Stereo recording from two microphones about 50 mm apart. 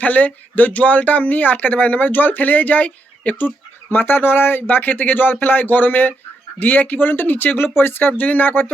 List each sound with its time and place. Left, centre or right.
0.0 s speech: left